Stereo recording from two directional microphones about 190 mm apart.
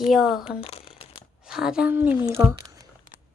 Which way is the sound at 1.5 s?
5° right (ahead or behind).